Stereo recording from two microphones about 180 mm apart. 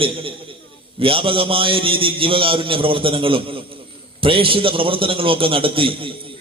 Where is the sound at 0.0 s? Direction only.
30° right (ahead or behind).